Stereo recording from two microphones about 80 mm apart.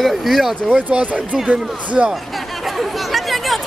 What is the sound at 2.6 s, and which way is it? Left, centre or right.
Chatter, centre.